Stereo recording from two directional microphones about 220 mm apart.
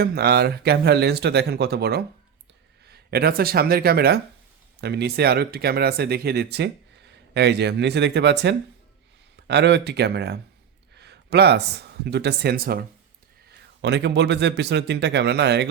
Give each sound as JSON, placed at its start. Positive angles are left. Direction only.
{"t": 0.0, "sound": "speech", "side_deg": -45}